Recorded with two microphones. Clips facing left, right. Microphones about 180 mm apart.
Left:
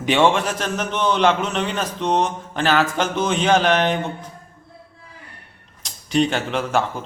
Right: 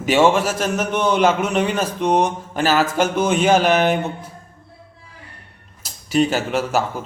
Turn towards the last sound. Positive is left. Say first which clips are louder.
# right 1 dB
turn(degrees=-5)  # may be behind; listen again after turning